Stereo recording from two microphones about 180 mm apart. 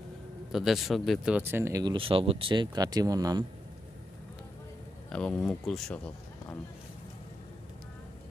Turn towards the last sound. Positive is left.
turn(degrees=5)  # may be behind; listen again after turning